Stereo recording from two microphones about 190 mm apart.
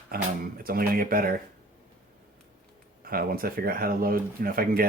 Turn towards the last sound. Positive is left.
turn(degrees=-50)  # may be behind; listen again after turning